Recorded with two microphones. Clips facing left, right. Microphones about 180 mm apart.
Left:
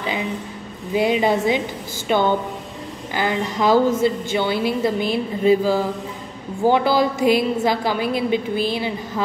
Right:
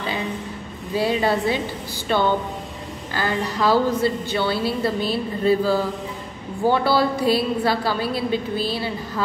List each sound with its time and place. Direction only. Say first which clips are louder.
0.9 s a woman's voice: left 3 dB; 15° left (ahead or behind)